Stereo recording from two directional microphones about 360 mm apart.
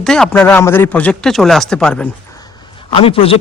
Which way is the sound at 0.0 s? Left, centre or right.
Centre.